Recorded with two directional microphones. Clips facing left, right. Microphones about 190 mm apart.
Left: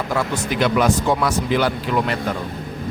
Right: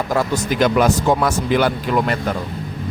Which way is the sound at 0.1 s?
40° right (ahead or behind).